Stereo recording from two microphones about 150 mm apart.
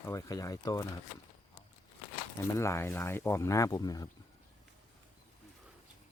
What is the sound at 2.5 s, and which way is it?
Speech, 20° left (ahead or behind).